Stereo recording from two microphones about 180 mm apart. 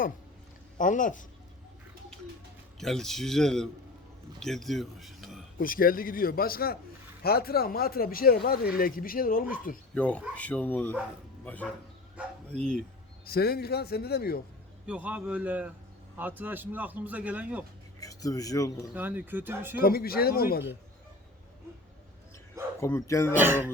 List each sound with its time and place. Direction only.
0.8 s a man's voice: 45° left (ahead or behind)
2.7 s a man's voice: centre (ahead or behind)
5.5 s a man's voice: 50° left (ahead or behind)
9.9 s a man's voice: 5° left (ahead or behind)
13.2 s speech: 60° left (ahead or behind)
14.8 s a man's voice: 5° right (ahead or behind)
18.0 s speech: 20° left (ahead or behind)
18.9 s a man's voice: 10° right (ahead or behind)
19.8 s speech: 55° left (ahead or behind)
22.8 s speech: 15° left (ahead or behind)
23.3 s a man's voice: 10° right (ahead or behind)